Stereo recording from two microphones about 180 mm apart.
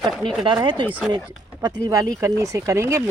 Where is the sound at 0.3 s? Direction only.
25° right (ahead or behind).